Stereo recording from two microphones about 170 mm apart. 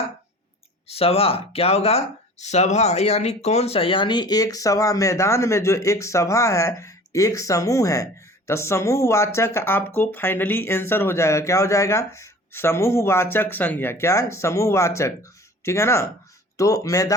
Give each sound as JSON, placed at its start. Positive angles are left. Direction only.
{"t": 0.9, "sound": "speech", "side_deg": 35}